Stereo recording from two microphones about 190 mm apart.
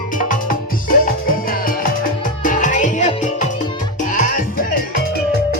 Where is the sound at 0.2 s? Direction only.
45° left (ahead or behind).